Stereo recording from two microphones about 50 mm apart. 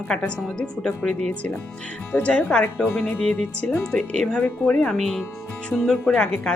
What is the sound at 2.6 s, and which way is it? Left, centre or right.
Speech, left.